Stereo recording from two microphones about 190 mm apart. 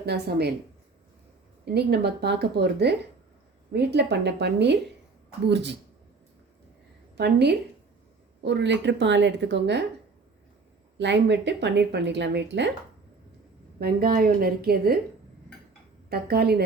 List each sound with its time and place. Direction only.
0.0 s speech: 60° right (ahead or behind)
1.6 s speech: 60° right (ahead or behind)
7.2 s speech: 60° right (ahead or behind)
10.9 s speech: 65° right (ahead or behind)
13.7 s a woman's voice: 50° right (ahead or behind)
16.0 s speech: 55° right (ahead or behind)